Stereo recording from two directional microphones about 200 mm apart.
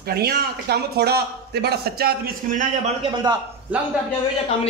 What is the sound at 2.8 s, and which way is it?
Speech, 25° right (ahead or behind).